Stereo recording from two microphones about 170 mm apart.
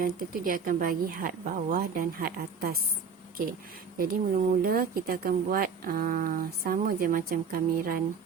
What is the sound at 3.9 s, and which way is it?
Speech, 60° right (ahead or behind).